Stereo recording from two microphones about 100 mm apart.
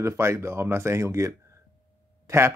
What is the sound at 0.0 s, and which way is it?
Speech, 30° right (ahead or behind).